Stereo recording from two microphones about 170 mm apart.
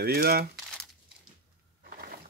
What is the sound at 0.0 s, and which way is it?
Speech, 70° right (ahead or behind).